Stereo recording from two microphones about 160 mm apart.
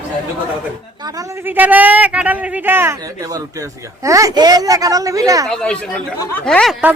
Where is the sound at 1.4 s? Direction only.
10° right (ahead or behind).